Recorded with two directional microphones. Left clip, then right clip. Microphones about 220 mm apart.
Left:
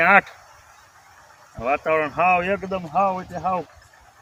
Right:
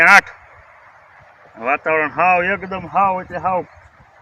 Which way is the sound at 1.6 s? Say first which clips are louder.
Right 4 dB; 20° left (ahead or behind).